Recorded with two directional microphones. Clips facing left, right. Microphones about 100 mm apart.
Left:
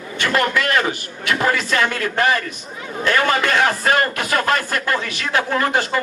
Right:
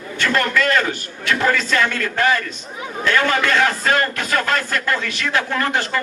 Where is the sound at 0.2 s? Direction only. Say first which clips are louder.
Even; 10° left (ahead or behind).